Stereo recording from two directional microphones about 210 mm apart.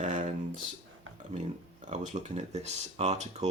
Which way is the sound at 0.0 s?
35° right (ahead or behind).